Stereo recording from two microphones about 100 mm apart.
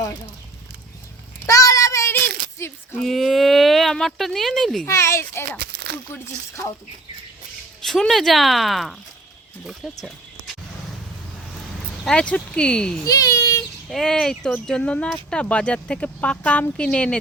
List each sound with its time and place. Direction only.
1.5 s a sound: 35° left (ahead or behind)
3.0 s speech: centre (ahead or behind)
4.9 s a child's voice: 30° left (ahead or behind)
7.8 s speech: 5° left (ahead or behind)
12.0 s speech: 10° left (ahead or behind)
13.1 s a child's voice: 35° left (ahead or behind)
13.8 s speech: 5° left (ahead or behind)